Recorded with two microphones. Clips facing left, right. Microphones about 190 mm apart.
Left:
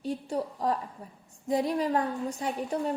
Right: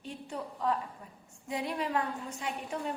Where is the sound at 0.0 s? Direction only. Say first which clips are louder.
Left 8 dB; 40° left (ahead or behind).